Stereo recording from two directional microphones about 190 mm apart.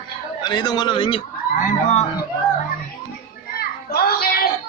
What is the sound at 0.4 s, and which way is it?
Speech, 20° left (ahead or behind).